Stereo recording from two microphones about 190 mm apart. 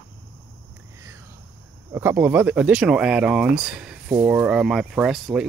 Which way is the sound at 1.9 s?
10° right (ahead or behind).